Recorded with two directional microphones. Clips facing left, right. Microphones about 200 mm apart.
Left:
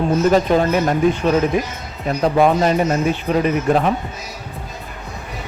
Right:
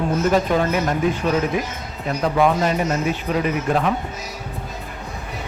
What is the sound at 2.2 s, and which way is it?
A man's voice, 35° left (ahead or behind).